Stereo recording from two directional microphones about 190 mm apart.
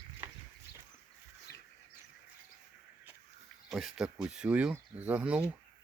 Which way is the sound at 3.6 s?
Centre (ahead or behind).